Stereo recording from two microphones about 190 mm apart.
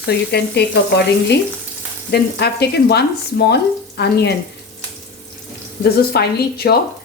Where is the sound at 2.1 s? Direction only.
60° left (ahead or behind).